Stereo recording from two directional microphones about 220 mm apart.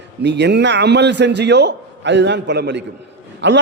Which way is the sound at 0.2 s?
50° right (ahead or behind).